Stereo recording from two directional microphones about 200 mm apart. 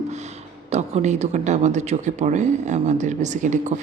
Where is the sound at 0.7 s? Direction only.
35° right (ahead or behind).